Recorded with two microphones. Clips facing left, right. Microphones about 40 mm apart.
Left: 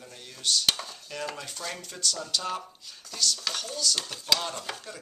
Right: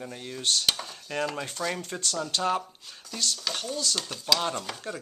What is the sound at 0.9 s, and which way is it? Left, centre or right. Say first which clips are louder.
Dishes: right 6 dB; right.